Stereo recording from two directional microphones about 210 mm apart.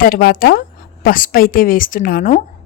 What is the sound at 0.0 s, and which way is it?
A woman's voice, 45° left (ahead or behind).